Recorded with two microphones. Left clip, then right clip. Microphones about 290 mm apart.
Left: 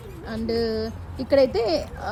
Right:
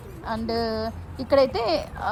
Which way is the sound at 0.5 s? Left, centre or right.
Centre.